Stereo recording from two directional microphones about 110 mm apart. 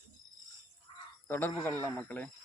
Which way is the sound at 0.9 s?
55° left (ahead or behind).